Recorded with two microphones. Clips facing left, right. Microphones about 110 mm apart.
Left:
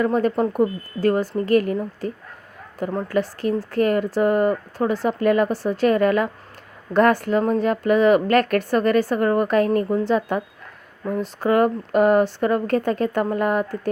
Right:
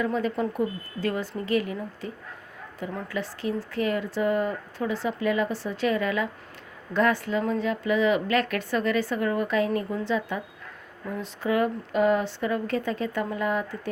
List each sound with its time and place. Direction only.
0.0 s a woman's voice: 50° left (ahead or behind)